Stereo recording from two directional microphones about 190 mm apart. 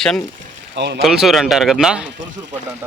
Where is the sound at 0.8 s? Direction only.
60° right (ahead or behind).